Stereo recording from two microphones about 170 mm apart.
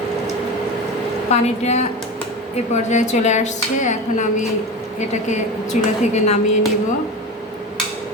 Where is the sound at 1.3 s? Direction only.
40° left (ahead or behind).